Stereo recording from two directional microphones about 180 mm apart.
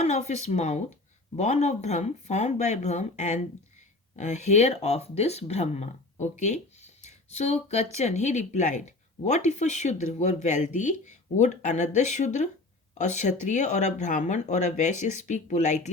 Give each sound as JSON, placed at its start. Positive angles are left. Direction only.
{"t": 0.0, "sound": "speech", "side_deg": 40}